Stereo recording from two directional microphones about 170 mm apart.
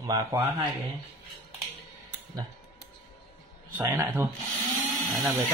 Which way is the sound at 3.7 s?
15° right (ahead or behind).